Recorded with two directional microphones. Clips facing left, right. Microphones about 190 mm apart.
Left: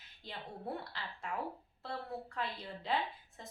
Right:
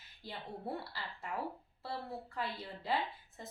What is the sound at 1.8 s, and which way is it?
A woman's voice, 5° right (ahead or behind).